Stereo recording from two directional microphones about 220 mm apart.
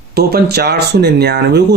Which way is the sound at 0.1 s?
45° right (ahead or behind).